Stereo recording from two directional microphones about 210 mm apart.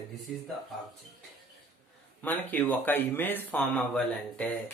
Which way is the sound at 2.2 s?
10° left (ahead or behind).